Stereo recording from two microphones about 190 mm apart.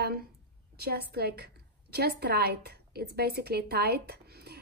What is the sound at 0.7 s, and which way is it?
A woman's voice, 55° right (ahead or behind).